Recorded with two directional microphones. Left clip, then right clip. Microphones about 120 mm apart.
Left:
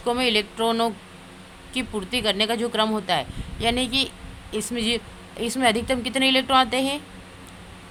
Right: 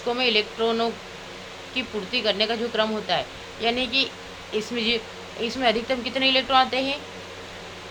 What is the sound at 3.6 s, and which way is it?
Speech, 75° left (ahead or behind).